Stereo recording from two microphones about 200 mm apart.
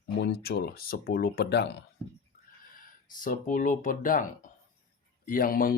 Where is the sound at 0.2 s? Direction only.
55° left (ahead or behind).